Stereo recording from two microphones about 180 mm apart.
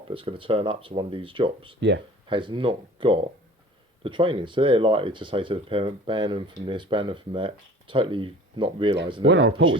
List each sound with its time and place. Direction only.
0.1 s speech: 30° right (ahead or behind)
9.2 s speech: 70° right (ahead or behind)